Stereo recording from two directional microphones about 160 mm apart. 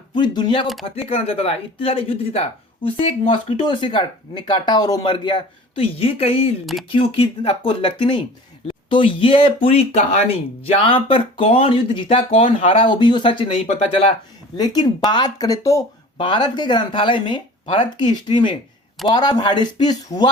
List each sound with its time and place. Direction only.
0.1 s speech: 30° left (ahead or behind)